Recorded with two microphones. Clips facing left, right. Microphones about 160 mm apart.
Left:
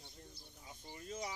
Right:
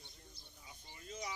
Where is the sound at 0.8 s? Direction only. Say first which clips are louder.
Left 3 dB; 40° left (ahead or behind).